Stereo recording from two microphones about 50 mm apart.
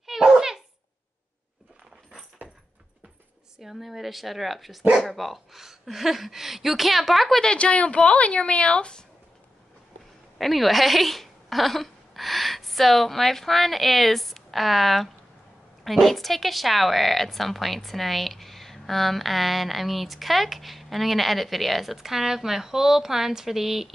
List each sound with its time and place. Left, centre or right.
0.0 s a sound: centre
3.5 s a woman's voice: centre
7.4 s a woman's voice: left
10.3 s a woman's voice: centre